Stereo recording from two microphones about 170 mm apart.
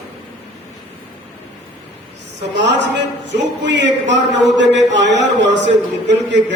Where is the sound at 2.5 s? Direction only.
90° right.